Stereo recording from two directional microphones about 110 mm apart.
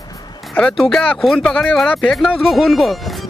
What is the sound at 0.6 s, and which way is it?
Speech, 5° left (ahead or behind).